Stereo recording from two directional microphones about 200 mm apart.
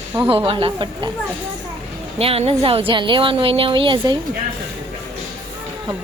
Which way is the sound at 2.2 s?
30° right (ahead or behind).